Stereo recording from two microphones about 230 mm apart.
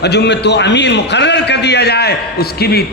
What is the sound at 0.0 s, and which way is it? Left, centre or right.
A man's voice, left.